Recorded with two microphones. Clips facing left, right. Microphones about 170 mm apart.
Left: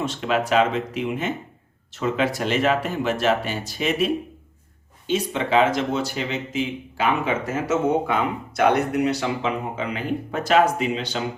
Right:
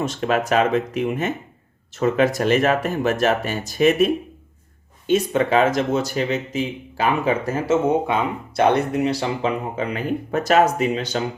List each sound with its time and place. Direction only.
0.0 s speech: 45° right (ahead or behind)